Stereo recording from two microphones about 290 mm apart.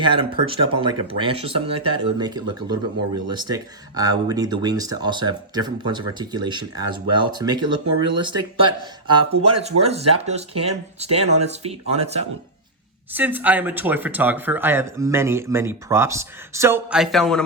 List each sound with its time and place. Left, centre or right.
0.0 s speech: centre
13.1 s speech: centre